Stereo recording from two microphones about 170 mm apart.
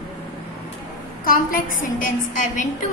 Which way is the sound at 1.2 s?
55° left (ahead or behind).